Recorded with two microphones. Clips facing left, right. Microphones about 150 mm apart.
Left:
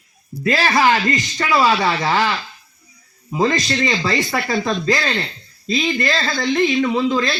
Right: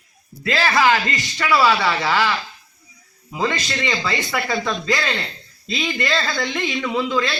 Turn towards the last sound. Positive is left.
turn(degrees=40)  # may be behind; listen again after turning